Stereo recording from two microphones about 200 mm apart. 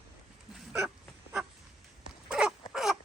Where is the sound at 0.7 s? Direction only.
5° right (ahead or behind).